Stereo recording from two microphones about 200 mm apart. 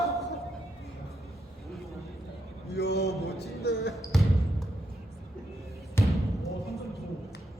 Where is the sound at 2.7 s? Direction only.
55° left (ahead or behind).